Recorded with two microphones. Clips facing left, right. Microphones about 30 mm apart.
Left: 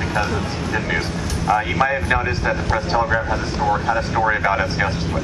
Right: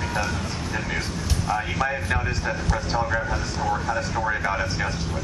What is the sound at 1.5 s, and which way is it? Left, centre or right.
Speech, left.